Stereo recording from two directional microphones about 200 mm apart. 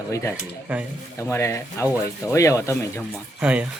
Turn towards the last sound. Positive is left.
turn(degrees=-5)  # may be behind; listen again after turning